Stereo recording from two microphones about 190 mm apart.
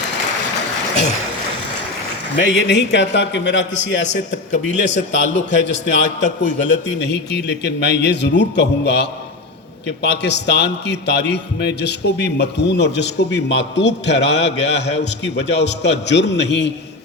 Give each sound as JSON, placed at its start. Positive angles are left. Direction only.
{"t": 2.3, "sound": "a man's voice", "side_deg": 65}